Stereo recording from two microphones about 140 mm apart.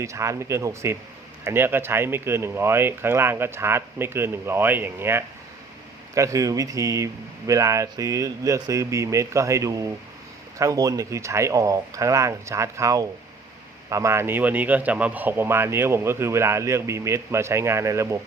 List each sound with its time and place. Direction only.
0.0 s a man's voice: 20° right (ahead or behind)